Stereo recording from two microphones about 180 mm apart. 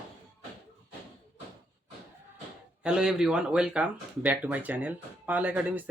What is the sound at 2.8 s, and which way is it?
Speech, 5° right (ahead or behind).